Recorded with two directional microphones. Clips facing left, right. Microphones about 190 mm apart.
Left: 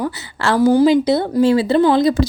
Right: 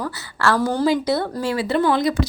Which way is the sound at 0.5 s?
10° left (ahead or behind).